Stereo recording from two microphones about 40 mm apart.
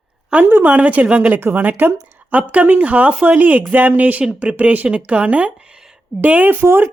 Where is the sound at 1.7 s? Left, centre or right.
Right.